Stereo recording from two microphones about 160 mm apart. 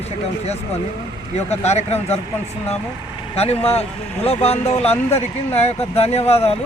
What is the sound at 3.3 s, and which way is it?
Speech, 40° left (ahead or behind).